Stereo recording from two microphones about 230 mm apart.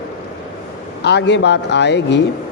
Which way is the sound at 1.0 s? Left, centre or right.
Left.